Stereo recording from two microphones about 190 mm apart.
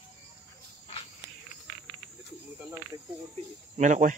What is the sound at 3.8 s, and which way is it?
Speech, 40° right (ahead or behind).